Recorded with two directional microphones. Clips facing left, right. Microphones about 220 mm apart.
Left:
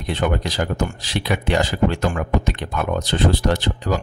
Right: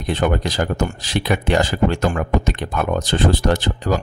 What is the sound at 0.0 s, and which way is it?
Speech, 45° right (ahead or behind).